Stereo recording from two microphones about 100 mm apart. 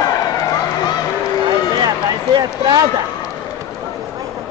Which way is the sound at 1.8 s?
45° right (ahead or behind).